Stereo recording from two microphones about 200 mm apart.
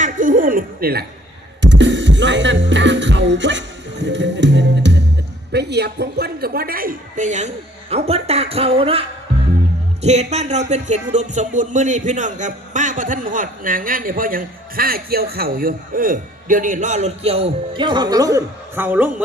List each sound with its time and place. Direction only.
0.0 s speech: 40° right (ahead or behind)
1.6 s music: 65° right (ahead or behind)
5.5 s speech: 55° right (ahead or behind); by 19.1 s 10° right (ahead or behind)